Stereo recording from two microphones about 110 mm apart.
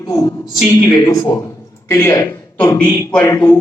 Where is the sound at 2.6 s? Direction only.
15° left (ahead or behind).